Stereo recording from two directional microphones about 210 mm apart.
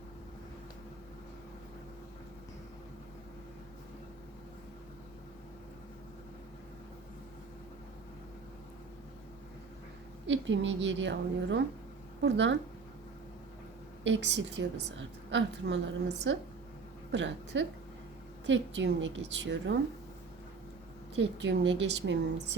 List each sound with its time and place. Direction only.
10.2 s a woman's voice: 60° right (ahead or behind)
14.0 s a woman's voice: 55° right (ahead or behind)
21.2 s a woman's voice: 60° right (ahead or behind)